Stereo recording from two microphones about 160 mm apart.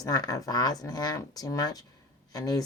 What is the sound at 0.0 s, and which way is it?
A woman's voice, 25° left (ahead or behind).